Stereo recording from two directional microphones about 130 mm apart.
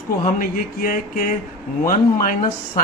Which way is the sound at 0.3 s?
90° left.